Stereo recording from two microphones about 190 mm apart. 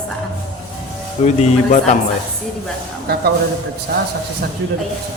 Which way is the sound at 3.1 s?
55° right (ahead or behind).